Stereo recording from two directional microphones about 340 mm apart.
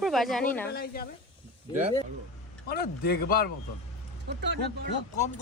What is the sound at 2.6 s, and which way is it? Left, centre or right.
Speech, left.